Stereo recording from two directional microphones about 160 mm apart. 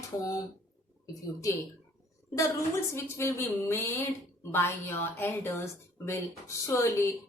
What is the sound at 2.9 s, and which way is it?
A woman's voice, 15° left (ahead or behind).